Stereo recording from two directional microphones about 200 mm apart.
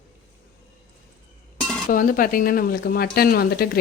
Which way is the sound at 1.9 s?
40° left (ahead or behind).